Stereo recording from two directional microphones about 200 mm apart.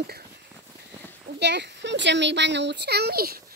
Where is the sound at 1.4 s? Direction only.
60° right (ahead or behind).